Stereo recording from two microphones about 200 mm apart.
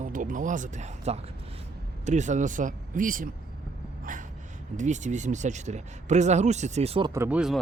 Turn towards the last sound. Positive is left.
turn(degrees=-5)  # may be behind; listen again after turning